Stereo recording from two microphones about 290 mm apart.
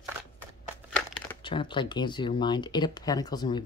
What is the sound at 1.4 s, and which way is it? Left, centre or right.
Speech, centre.